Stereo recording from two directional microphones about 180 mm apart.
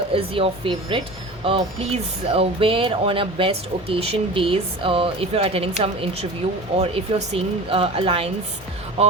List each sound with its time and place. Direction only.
0.1 s speech: 30° right (ahead or behind)